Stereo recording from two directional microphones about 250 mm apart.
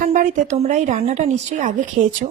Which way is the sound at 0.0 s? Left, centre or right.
Right.